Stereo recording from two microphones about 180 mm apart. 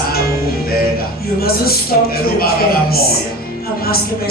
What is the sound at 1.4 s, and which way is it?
A man's voice, 55° left (ahead or behind).